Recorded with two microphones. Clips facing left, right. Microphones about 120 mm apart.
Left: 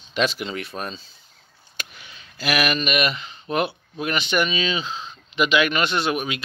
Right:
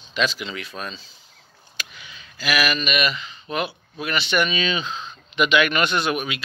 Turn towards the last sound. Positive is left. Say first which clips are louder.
# even
turn(degrees=35)  # may be behind; listen again after turning